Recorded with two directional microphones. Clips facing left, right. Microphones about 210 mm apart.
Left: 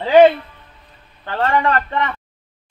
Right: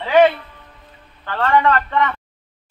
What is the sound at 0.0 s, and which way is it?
Music, 30° left (ahead or behind).